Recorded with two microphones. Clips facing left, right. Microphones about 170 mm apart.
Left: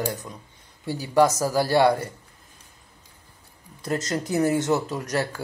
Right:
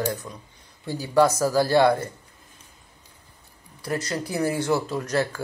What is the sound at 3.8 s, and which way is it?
Speech, 20° left (ahead or behind).